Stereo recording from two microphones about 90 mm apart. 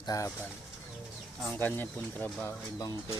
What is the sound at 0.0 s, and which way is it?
Speech, 45° left (ahead or behind).